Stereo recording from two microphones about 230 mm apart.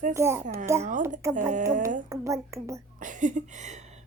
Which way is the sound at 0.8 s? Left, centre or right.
Right.